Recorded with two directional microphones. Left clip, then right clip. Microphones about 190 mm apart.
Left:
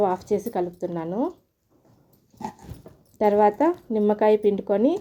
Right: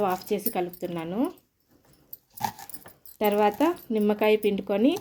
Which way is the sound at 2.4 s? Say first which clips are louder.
Right 4 dB; 65° right (ahead or behind).